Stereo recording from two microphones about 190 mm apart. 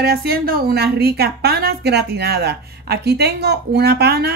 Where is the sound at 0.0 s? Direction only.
55° right (ahead or behind).